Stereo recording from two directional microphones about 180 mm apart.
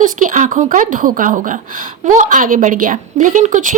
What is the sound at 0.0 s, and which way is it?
A woman's voice, 45° right (ahead or behind).